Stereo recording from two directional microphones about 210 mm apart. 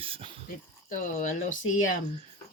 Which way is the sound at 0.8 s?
40° left (ahead or behind).